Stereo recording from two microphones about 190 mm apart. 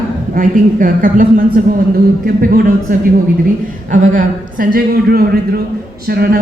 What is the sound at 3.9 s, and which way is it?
A man's voice, 40° right (ahead or behind).